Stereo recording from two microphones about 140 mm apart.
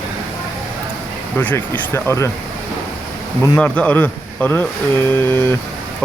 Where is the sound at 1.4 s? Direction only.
10° left (ahead or behind).